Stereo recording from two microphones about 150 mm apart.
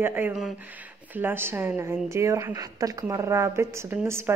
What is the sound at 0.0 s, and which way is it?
A woman's voice, 10° right (ahead or behind).